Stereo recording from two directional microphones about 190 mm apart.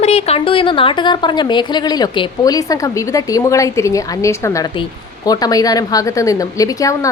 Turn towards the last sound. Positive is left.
turn(degrees=15)  # may be behind; listen again after turning